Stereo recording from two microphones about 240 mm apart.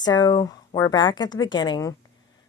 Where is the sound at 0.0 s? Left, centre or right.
Centre.